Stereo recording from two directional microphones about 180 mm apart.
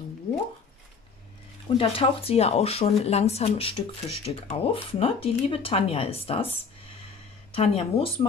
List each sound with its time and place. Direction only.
1.8 s speech: 30° left (ahead or behind)
7.5 s speech: 35° left (ahead or behind)